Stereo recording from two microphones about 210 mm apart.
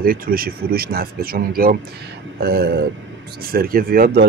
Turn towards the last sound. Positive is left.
turn(degrees=-45)  # may be behind; listen again after turning